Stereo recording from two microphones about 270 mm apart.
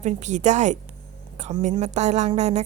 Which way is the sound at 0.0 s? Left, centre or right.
Right.